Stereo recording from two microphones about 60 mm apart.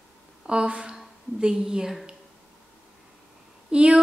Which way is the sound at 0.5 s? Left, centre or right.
Centre.